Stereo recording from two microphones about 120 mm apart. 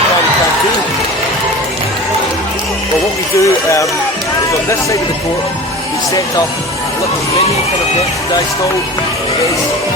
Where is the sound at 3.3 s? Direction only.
25° left (ahead or behind).